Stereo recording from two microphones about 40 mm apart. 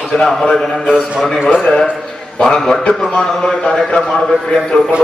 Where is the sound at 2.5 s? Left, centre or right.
Left.